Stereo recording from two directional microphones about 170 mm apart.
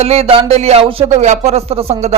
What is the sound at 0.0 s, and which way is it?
Speech, 35° right (ahead or behind).